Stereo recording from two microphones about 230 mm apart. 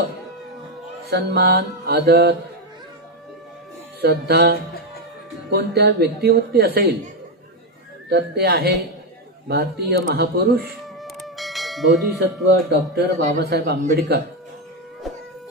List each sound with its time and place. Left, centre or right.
1.1 s a man's voice: right
4.0 s a man's voice: right
8.1 s a man's voice: right
11.0 s music: centre
12.6 s a man's voice: right